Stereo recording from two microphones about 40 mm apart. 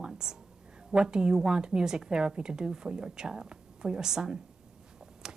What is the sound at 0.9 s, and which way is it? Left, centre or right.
A woman's voice, centre.